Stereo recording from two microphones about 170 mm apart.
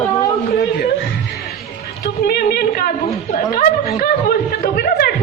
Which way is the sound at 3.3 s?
40° left (ahead or behind).